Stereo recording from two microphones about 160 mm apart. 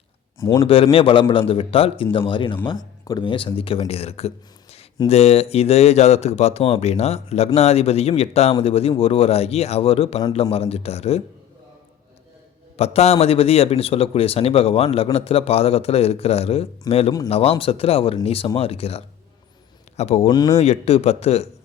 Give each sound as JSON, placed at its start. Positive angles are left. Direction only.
{"t": 0.3, "sound": "speech", "side_deg": 20}
{"t": 0.6, "sound": "a man's voice", "side_deg": 35}
{"t": 12.7, "sound": "a man's voice", "side_deg": 40}
{"t": 16.9, "sound": "speech", "side_deg": 25}
{"t": 17.2, "sound": "a man's voice", "side_deg": 40}
{"t": 20.3, "sound": "speech", "side_deg": 25}
{"t": 20.6, "sound": "a man's voice", "side_deg": 40}